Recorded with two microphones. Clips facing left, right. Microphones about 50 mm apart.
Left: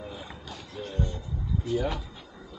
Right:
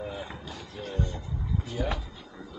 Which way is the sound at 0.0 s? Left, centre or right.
Centre.